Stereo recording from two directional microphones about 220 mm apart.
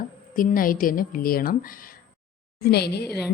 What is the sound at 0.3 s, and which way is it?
A woman's voice, 40° left (ahead or behind).